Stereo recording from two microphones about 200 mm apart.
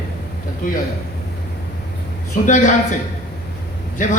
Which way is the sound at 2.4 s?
40° left (ahead or behind).